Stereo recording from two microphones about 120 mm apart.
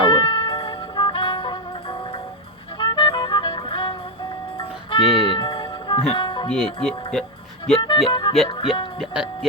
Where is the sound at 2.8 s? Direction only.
45° left (ahead or behind).